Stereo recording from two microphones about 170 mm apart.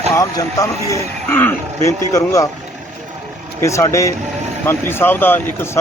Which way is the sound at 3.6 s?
15° left (ahead or behind).